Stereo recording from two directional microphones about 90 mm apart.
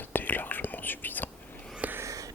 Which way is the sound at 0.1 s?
20° left (ahead or behind).